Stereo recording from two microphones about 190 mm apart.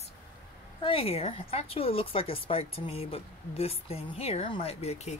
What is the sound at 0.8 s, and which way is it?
Speech, 30° left (ahead or behind).